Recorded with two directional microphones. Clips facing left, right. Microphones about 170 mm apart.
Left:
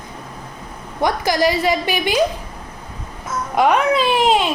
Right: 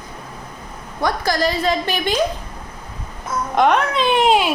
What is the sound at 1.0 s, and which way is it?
A woman's voice, 15° left (ahead or behind).